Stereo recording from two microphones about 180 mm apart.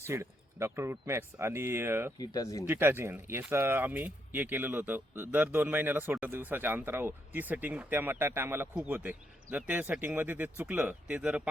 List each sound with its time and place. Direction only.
0.1 s speech: 15° right (ahead or behind)
2.1 s speech: 20° left (ahead or behind)
2.6 s speech: 10° right (ahead or behind)